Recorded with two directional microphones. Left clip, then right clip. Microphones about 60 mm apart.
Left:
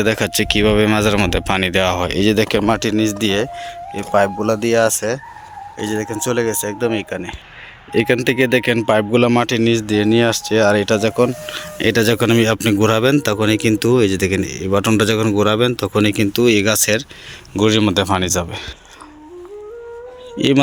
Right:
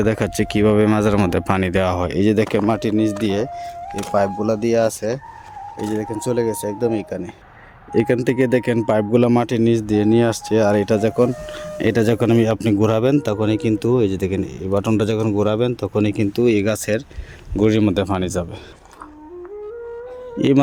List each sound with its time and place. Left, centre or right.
0.0 s speech: right
1.8 s speech: right
3.0 s speech: right
4.1 s speech: centre
7.9 s speech: right
11.4 s speech: right
20.4 s speech: right